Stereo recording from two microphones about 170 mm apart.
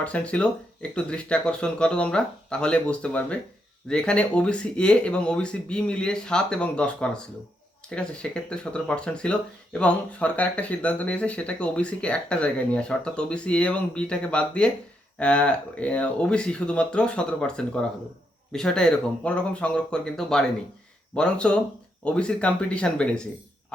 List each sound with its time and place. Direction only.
0.0 s speech: 5° left (ahead or behind)